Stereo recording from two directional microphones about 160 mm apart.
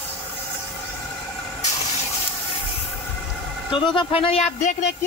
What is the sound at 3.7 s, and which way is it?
Speech, 30° left (ahead or behind).